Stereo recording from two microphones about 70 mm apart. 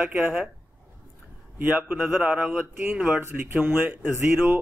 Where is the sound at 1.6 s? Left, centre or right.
Right.